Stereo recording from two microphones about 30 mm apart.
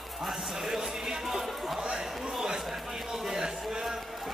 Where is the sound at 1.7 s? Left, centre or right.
Centre.